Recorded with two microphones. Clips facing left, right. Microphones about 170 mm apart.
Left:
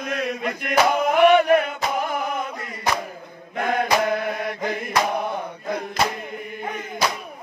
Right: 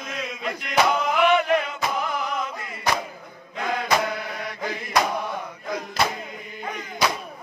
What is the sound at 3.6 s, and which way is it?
Mantra, 55° left (ahead or behind).